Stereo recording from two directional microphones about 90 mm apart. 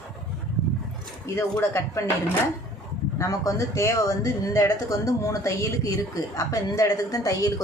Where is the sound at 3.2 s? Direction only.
35° left (ahead or behind).